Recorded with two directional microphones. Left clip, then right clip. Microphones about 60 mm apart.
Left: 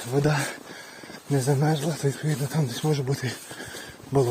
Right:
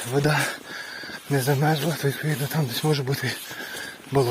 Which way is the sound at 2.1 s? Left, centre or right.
Left.